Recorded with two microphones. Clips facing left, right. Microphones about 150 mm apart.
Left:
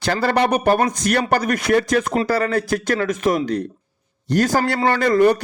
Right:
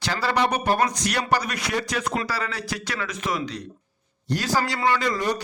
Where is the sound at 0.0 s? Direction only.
50° left (ahead or behind).